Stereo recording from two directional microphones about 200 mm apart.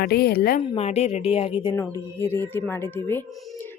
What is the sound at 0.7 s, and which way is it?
Speech, 30° left (ahead or behind).